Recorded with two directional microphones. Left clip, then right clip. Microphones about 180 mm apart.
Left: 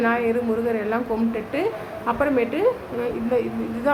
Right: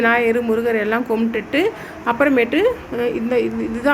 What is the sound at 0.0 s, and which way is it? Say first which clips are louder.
A woman's voice: right 5 dB; 25° right (ahead or behind).